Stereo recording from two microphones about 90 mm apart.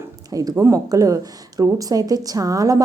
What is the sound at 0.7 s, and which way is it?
A woman's voice, 40° right (ahead or behind).